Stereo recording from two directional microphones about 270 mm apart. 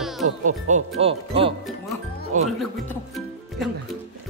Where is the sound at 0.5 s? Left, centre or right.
Right.